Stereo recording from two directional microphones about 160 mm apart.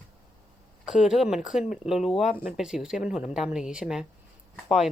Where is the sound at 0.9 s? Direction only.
5° right (ahead or behind).